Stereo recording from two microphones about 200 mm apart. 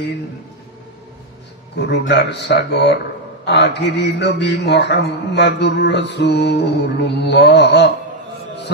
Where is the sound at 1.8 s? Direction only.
55° left (ahead or behind).